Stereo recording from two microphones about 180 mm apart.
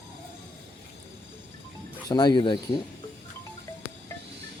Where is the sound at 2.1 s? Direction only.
25° left (ahead or behind).